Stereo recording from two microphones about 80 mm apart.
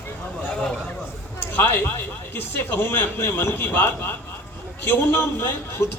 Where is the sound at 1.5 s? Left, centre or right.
Left.